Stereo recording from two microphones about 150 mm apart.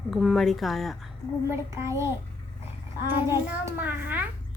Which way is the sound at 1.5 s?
20° right (ahead or behind).